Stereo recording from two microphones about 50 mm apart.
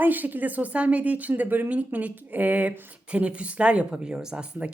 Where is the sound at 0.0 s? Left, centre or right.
Right; by 4.4 s centre.